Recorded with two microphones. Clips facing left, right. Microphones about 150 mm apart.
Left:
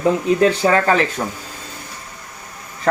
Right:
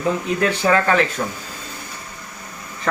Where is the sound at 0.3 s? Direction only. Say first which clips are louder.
Left 3 dB; 30° left (ahead or behind).